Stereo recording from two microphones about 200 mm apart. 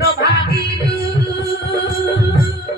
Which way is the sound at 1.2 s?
50° left (ahead or behind).